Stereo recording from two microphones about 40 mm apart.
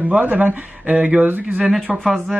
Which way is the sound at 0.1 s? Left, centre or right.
Right.